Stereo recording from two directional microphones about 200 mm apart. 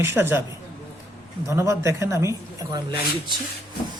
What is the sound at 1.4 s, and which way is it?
A woman's voice, 15° right (ahead or behind).